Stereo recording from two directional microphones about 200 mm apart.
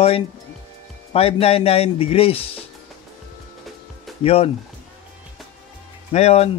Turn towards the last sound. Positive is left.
turn(degrees=30)  # may be behind; listen again after turning